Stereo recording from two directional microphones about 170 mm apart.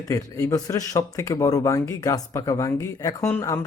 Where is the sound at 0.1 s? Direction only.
20° left (ahead or behind).